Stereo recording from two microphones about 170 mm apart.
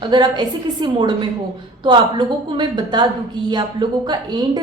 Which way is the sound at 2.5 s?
25° right (ahead or behind).